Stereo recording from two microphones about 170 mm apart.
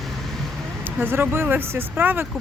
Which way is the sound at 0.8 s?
10° right (ahead or behind).